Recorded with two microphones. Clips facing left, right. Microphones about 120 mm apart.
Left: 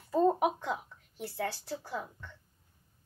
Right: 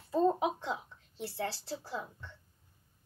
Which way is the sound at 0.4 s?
25° right (ahead or behind).